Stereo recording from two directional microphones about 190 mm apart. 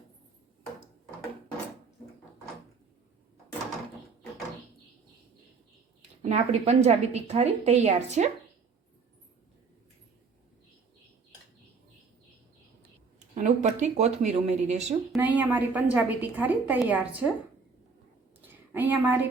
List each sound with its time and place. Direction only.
6.2 s a woman's voice: 35° right (ahead or behind)
13.1 s a woman's voice: 40° right (ahead or behind)
15.1 s a woman's voice: 10° right (ahead or behind)
18.4 s a sound: 10° right (ahead or behind)